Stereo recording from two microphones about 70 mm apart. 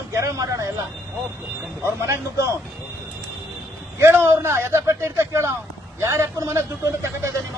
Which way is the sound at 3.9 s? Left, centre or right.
Right.